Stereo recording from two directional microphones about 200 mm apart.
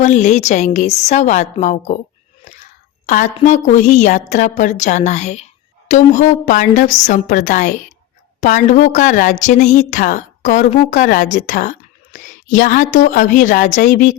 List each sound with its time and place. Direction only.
0.0 s a woman's voice: 35° left (ahead or behind)
2.4 s a sound: 35° left (ahead or behind)
3.1 s a woman's voice: 40° left (ahead or behind)